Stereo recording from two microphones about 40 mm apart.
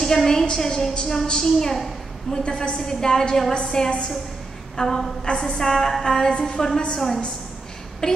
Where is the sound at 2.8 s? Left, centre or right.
Centre.